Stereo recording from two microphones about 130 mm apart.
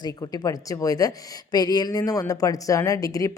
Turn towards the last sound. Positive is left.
turn(degrees=25)  # may be behind; listen again after turning